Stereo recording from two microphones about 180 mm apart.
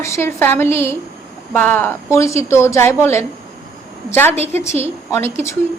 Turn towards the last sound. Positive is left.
turn(degrees=15)  # may be behind; listen again after turning